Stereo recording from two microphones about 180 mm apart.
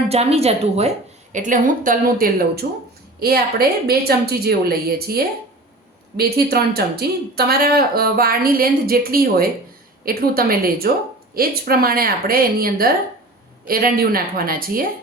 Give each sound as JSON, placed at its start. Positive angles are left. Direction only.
{"t": 0.1, "sound": "a woman's voice", "side_deg": -35}